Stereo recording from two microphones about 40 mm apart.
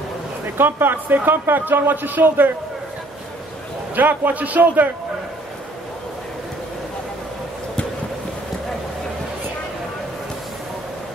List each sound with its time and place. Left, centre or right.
0.6 s a man's voice: right
3.9 s a man's voice: right